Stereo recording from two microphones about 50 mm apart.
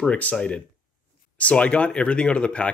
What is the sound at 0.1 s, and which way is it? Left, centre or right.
Speech, left.